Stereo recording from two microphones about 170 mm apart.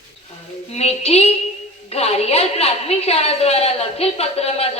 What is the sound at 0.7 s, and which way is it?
A woman's voice, 40° left (ahead or behind).